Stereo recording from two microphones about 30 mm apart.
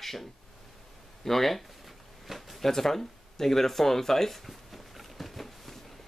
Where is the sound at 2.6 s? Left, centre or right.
Centre.